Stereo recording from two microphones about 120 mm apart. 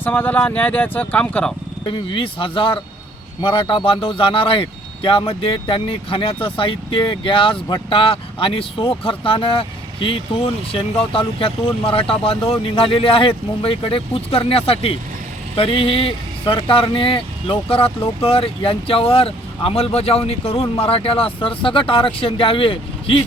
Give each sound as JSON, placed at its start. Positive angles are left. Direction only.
{"t": 0.0, "sound": "speech", "side_deg": 15}
{"t": 1.8, "sound": "speech", "side_deg": 45}